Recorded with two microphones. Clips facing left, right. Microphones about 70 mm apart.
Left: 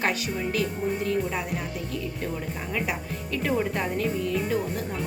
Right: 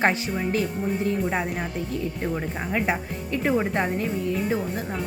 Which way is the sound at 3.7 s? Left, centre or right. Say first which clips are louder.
Right 3 dB; right.